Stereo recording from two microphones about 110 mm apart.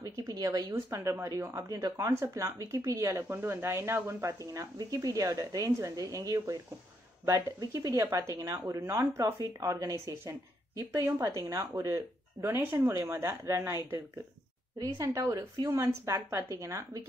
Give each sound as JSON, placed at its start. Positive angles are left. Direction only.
{"t": 0.0, "sound": "speech", "side_deg": -35}